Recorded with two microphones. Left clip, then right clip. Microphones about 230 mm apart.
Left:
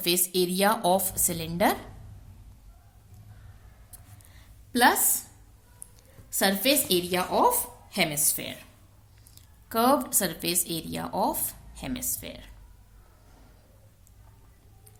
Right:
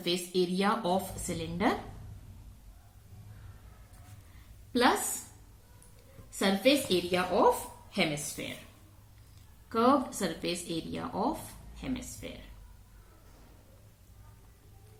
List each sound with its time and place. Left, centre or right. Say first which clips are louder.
0.0 s speech: left 4 dB; left
4.7 s a woman's voice: left 5 dB; left
6.3 s speech: left 2 dB; left
9.6 s speech: left 3 dB; left